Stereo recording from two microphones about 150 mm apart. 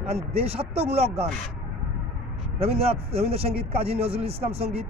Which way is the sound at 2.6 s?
40° right (ahead or behind).